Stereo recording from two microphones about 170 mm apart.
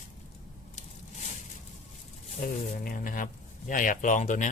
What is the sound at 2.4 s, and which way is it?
Speech, 55° left (ahead or behind).